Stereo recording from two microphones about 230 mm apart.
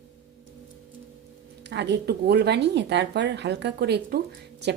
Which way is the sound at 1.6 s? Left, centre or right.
Right.